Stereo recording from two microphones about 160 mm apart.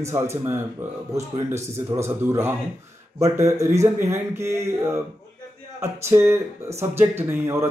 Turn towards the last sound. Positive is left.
turn(degrees=-15)  # may be behind; listen again after turning